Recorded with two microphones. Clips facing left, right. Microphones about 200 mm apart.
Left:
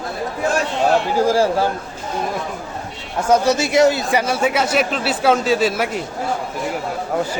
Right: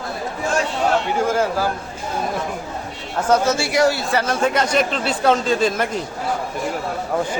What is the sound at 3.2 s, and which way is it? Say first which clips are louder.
Speech: left 2 dB; 10° left (ahead or behind).